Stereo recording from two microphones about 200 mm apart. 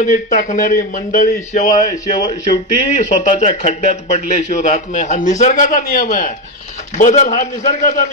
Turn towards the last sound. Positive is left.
turn(degrees=40)  # may be behind; listen again after turning